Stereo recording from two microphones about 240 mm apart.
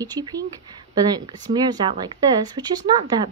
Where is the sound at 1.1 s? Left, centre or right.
Centre.